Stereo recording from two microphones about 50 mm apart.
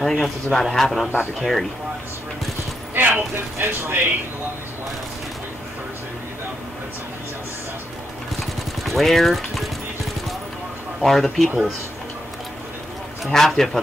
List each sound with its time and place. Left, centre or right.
0.0 s a man's voice: centre
3.0 s speech: right
8.8 s speech: centre
11.0 s a man's voice: centre
13.2 s a man's voice: centre